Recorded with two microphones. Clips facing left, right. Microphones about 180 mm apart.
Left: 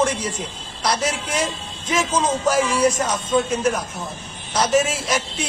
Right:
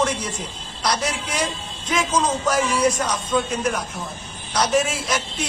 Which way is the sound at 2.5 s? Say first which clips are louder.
Left 2 dB; 25° left (ahead or behind).